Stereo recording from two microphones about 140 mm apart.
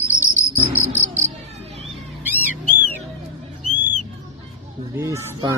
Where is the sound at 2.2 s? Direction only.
10° right (ahead or behind).